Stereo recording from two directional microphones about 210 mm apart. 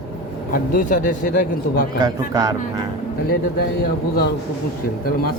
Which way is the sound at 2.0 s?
20° right (ahead or behind).